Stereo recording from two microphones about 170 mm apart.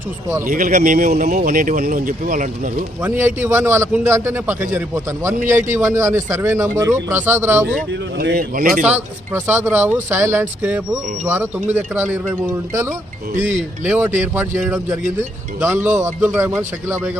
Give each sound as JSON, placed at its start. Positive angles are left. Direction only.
{"t": 0.4, "sound": "speech", "side_deg": -55}
{"t": 3.0, "sound": "a man's voice", "side_deg": -10}
{"t": 8.2, "sound": "speech", "side_deg": -65}
{"t": 8.8, "sound": "a man's voice", "side_deg": -10}
{"t": 13.8, "sound": "a man's voice", "side_deg": -10}